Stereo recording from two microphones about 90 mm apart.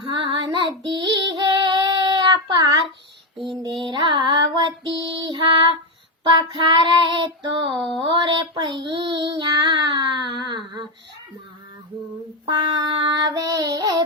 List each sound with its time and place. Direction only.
0.0 s child singing: 65° right (ahead or behind)
7.7 s a sound: centre (ahead or behind)
8.0 s child singing: 60° right (ahead or behind)
12.5 s child singing: 70° right (ahead or behind)
13.3 s child singing: 45° right (ahead or behind)